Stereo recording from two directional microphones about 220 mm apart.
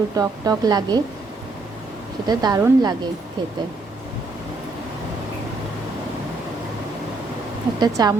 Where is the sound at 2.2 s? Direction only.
20° right (ahead or behind).